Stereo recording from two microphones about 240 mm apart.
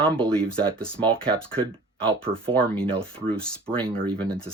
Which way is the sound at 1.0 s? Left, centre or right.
Right.